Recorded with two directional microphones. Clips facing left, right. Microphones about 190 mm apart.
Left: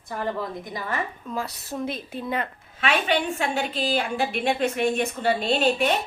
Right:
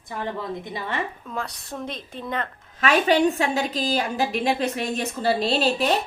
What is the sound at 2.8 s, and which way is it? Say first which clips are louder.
A woman's voice: right 5 dB; 40° right (ahead or behind).